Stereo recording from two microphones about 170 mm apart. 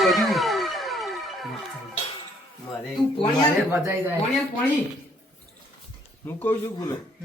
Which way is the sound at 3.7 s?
10° right (ahead or behind).